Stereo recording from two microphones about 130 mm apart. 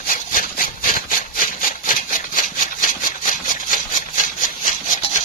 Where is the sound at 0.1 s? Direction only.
90° left.